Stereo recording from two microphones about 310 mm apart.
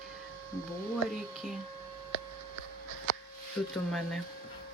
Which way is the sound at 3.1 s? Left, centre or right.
Left.